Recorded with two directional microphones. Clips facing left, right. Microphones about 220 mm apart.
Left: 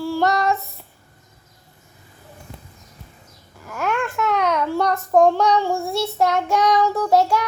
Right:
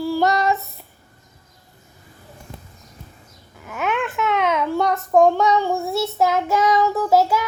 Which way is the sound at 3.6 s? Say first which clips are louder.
Even; centre (ahead or behind).